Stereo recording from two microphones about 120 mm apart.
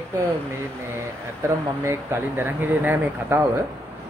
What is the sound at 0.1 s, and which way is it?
Speech, 20° right (ahead or behind).